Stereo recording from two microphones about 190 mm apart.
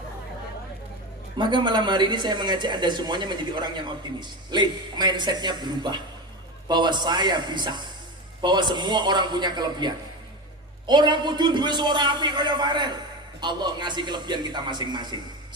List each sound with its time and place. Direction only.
1.4 s speech: 25° right (ahead or behind)